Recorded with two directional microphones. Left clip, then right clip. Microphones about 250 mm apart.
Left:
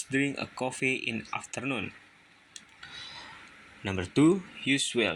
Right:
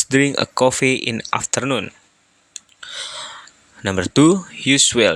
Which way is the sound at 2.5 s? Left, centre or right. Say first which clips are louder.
Right 13 dB; right.